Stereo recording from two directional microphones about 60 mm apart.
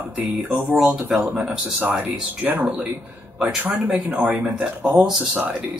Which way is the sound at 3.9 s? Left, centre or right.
Right.